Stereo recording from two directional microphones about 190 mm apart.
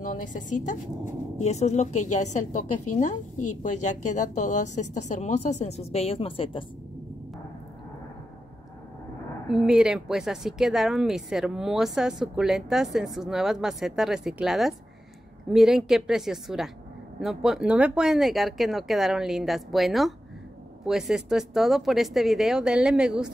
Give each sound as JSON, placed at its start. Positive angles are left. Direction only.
{"t": 0.0, "sound": "a woman's voice", "side_deg": 45}
{"t": 9.5, "sound": "speech", "side_deg": 0}